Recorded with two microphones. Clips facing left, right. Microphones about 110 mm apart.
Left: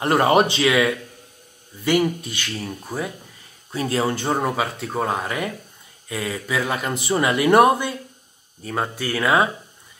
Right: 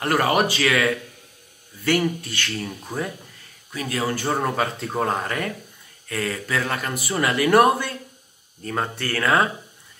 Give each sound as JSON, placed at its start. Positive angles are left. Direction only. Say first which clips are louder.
{"t": 0.0, "sound": "speech", "louder": "left 3 dB", "side_deg": 25}
{"t": 3.7, "sound": "speech", "louder": "left 3 dB", "side_deg": 30}
{"t": 4.4, "sound": "speech", "louder": "even", "side_deg": 5}
{"t": 8.6, "sound": "speech", "louder": "left 1 dB", "side_deg": 5}